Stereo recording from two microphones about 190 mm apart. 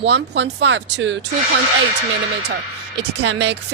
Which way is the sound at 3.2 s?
65° right (ahead or behind).